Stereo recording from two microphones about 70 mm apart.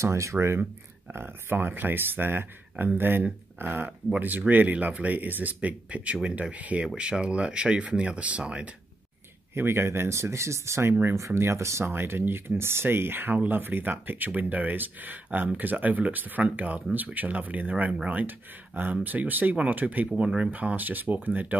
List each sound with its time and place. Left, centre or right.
0.0 s speech: right
1.1 s speech: right
9.5 s speech: right
11.1 s speech: right
20.1 s speech: centre